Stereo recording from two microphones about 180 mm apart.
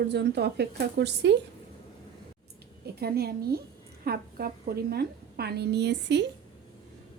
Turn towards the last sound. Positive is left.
turn(degrees=-70)  # may be behind; listen again after turning